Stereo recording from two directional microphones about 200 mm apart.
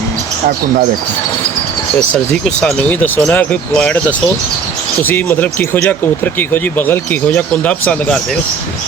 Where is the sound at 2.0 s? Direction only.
5° left (ahead or behind).